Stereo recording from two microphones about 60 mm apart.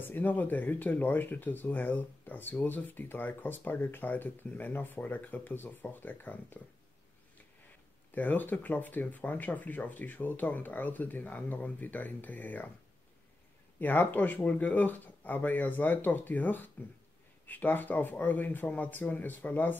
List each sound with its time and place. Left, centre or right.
0.0 s speech: left
8.1 s speech: left
13.7 s speech: left